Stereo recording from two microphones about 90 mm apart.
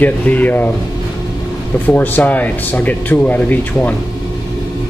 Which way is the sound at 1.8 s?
20° left (ahead or behind).